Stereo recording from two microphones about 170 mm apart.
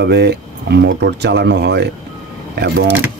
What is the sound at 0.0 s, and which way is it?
Speech, 75° right (ahead or behind).